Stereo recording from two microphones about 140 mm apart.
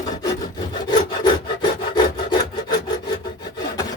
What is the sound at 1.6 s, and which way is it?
Rub, 30° left (ahead or behind).